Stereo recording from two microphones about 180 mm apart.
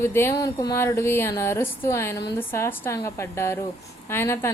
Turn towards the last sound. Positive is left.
turn(degrees=15)  # may be behind; listen again after turning